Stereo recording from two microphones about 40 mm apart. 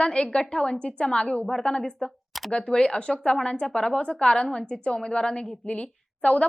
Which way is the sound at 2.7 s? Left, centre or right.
Left.